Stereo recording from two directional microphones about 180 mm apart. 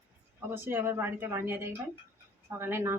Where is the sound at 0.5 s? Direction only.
10° right (ahead or behind).